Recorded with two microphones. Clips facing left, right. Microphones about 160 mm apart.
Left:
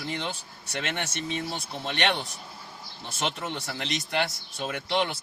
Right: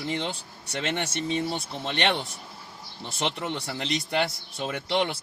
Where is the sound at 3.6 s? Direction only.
30° right (ahead or behind).